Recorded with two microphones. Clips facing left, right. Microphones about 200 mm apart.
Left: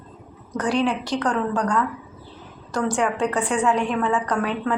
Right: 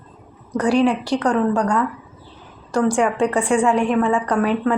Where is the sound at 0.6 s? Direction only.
5° right (ahead or behind).